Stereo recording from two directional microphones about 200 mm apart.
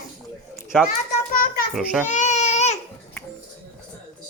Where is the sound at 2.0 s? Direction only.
35° left (ahead or behind).